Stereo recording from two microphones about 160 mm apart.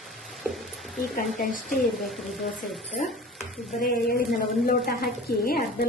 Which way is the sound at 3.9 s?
70° left (ahead or behind).